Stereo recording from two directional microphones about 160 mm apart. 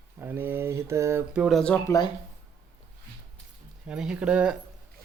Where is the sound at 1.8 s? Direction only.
20° left (ahead or behind).